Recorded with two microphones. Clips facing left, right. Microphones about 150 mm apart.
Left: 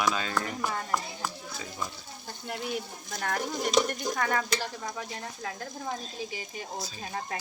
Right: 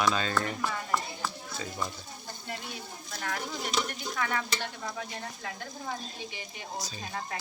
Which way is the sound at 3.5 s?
45° left (ahead or behind).